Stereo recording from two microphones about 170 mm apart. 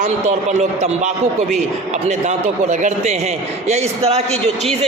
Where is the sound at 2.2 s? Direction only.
45° right (ahead or behind).